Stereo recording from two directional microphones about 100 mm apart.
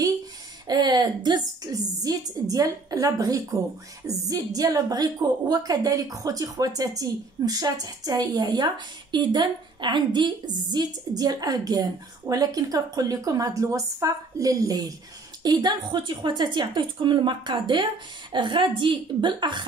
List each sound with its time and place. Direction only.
0.7 s a woman's voice: 45° right (ahead or behind)